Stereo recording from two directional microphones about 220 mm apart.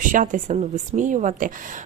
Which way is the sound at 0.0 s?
35° right (ahead or behind).